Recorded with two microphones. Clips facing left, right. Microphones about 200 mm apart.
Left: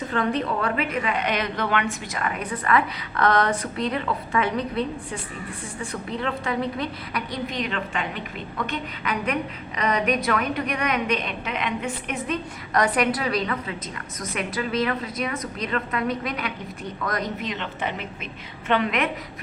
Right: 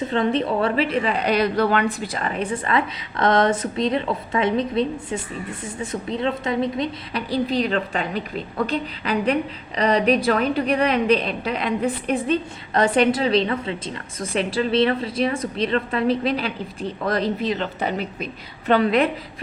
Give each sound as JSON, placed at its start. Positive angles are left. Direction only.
{"t": 0.1, "sound": "a woman's voice", "side_deg": -25}